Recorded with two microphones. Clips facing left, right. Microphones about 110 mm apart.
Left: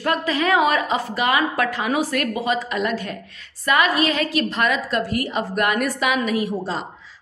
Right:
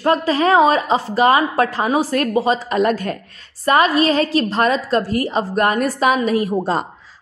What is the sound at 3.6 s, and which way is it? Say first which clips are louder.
A woman's voice: right 4 dB; 35° right (ahead or behind).